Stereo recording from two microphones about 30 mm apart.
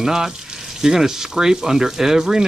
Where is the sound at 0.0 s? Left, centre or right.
Centre.